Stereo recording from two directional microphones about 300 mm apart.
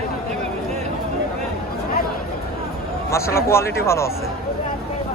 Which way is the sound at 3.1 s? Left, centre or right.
Centre.